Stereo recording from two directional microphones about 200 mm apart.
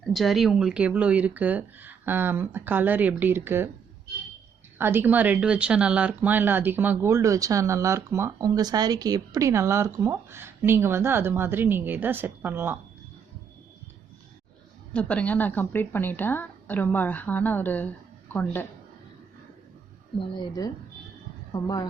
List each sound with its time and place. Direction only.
0.1 s speech: centre (ahead or behind)
4.8 s speech: 10° right (ahead or behind)
14.9 s a woman's voice: 5° left (ahead or behind)
20.1 s speech: 20° left (ahead or behind)